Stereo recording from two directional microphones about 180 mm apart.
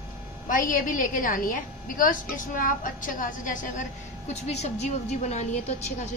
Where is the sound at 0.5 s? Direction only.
50° left (ahead or behind).